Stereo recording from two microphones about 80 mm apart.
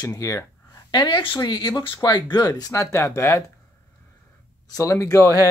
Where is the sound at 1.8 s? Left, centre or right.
Left.